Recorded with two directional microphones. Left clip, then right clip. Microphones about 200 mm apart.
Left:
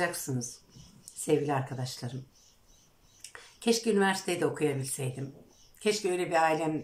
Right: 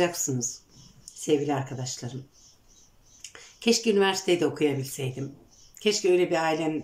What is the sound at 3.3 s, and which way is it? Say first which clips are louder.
Speech: right 4 dB; 5° right (ahead or behind).